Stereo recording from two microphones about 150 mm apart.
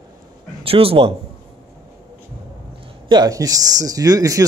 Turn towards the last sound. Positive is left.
turn(degrees=-25)  # may be behind; listen again after turning